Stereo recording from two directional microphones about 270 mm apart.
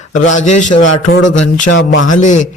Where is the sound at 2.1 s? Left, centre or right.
Left.